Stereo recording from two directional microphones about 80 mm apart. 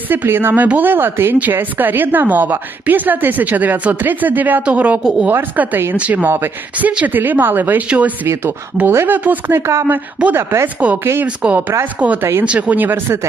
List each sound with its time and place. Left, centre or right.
0.1 s a woman's voice: right
6.2 s a woman's voice: right
8.3 s a woman's voice: right
10.8 s speech: centre
11.0 s speech: right
11.3 s a woman's voice: centre